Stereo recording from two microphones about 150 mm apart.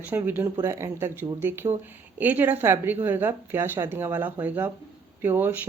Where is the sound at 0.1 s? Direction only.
15° right (ahead or behind).